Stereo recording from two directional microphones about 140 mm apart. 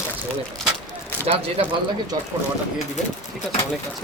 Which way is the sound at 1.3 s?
55° right (ahead or behind).